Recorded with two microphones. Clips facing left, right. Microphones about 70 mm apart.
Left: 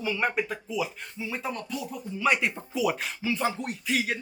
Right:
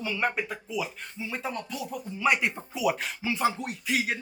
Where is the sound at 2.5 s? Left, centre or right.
Centre.